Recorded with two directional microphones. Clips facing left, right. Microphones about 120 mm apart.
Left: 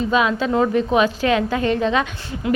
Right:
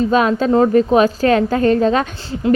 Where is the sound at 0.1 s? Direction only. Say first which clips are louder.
Right 4 dB; 40° right (ahead or behind).